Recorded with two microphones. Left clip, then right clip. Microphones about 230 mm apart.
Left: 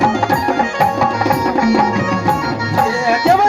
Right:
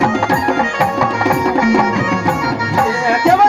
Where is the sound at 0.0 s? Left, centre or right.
Right.